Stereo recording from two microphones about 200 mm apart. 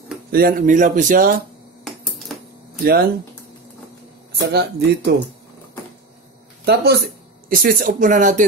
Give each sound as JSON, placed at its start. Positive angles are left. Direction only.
{"t": 0.3, "sound": "speech", "side_deg": -45}
{"t": 1.9, "sound": "typewriter", "side_deg": 0}
{"t": 2.8, "sound": "speech", "side_deg": -50}
{"t": 4.4, "sound": "speech", "side_deg": -55}
{"t": 6.6, "sound": "speech", "side_deg": -55}